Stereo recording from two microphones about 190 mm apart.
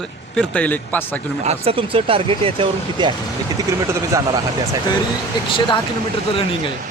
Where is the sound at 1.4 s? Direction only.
35° right (ahead or behind).